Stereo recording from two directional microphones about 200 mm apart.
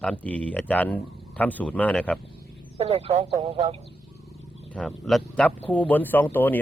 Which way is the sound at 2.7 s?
30° right (ahead or behind).